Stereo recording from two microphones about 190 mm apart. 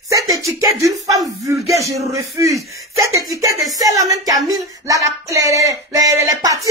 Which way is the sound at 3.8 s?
20° right (ahead or behind).